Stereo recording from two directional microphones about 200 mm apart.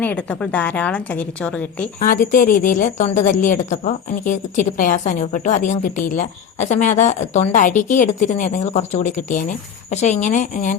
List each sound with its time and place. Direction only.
0.0 s a woman's voice: 5° left (ahead or behind)
2.0 s a woman's voice: 45° left (ahead or behind)